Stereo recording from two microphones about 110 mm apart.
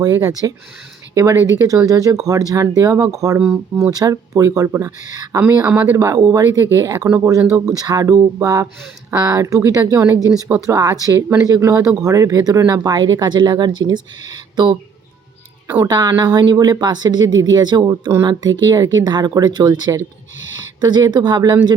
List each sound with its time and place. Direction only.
0.0 s speech: 30° right (ahead or behind)
3.4 s speech: 5° right (ahead or behind)
3.9 s speech: 30° right (ahead or behind)
5.6 s speech: 15° right (ahead or behind); by 14.8 s 40° right (ahead or behind)
15.6 s a woman's voice: 20° right (ahead or behind)
15.9 s speech: 40° right (ahead or behind)